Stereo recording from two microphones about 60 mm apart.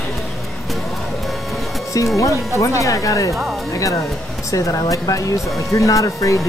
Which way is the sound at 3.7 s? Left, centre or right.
Left.